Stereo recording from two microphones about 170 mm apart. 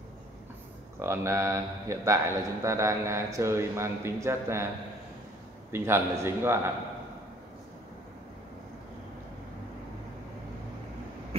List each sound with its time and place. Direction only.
0.9 s a man's voice: 15° right (ahead or behind)
5.7 s a man's voice: 15° right (ahead or behind)